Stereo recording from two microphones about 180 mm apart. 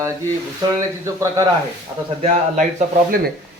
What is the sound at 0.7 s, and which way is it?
Speech, 15° right (ahead or behind).